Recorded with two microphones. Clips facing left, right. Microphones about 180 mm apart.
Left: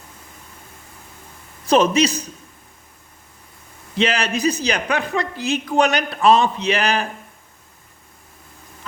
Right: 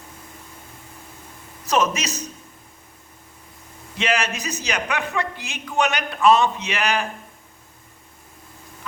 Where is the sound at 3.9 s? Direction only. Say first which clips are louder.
Left 3 dB; 30° left (ahead or behind).